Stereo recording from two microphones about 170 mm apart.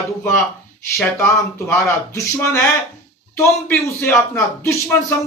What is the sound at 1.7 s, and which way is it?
Speech, 15° left (ahead or behind).